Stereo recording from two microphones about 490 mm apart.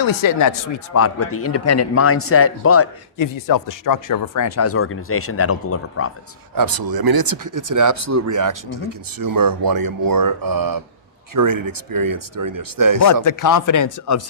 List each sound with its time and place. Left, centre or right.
0.2 s speech: left
1.0 s speech: left
3.2 s speech: left
6.5 s speech: right
13.2 s speech: left